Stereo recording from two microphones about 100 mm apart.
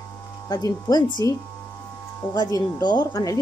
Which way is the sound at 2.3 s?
40° left (ahead or behind).